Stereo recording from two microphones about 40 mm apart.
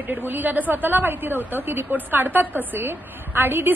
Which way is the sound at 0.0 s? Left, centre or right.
Right.